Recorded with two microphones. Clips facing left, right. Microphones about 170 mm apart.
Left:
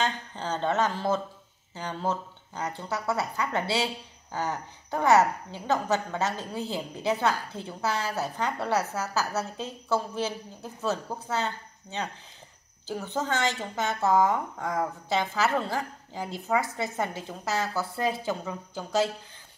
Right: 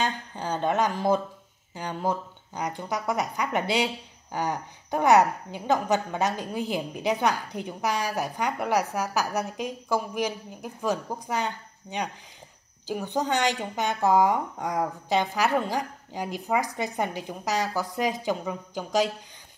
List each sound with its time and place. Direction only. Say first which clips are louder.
0.0 s speech: right 1 dB; 10° right (ahead or behind)